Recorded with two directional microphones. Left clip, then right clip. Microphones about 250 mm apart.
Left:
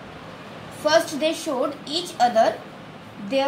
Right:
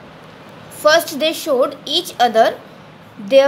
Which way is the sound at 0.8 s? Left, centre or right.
Right.